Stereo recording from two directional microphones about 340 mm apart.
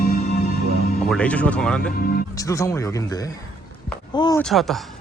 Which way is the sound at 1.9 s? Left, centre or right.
Left.